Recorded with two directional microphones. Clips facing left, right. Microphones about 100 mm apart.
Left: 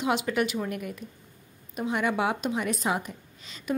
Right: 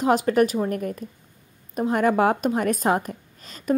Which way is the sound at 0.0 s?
40° right (ahead or behind).